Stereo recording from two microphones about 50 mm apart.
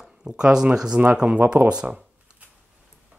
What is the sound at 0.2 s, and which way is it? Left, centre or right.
Speech, centre.